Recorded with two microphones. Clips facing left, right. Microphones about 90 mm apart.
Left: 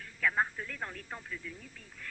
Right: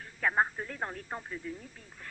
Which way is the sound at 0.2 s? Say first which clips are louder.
Right 2 dB; 35° right (ahead or behind).